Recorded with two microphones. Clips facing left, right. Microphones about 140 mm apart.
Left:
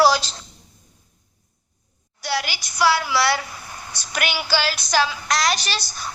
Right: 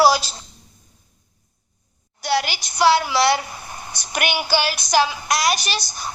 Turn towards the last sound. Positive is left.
turn(degrees=-15)  # may be behind; listen again after turning